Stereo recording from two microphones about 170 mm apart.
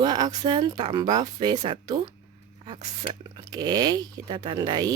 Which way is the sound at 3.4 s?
25° right (ahead or behind).